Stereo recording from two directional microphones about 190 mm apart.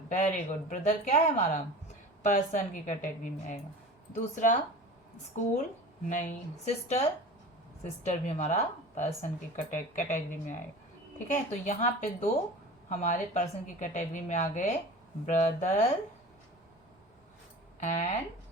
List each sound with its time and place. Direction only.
0.1 s speech: 40° left (ahead or behind)
17.7 s speech: 40° left (ahead or behind)